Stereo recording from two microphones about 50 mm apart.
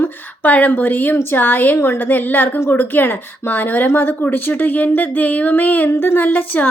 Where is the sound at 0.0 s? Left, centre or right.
Left.